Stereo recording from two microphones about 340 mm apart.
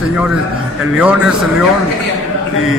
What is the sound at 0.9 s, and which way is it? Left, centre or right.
Speech, centre.